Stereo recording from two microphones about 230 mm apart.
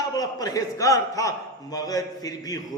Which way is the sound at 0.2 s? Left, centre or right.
Centre.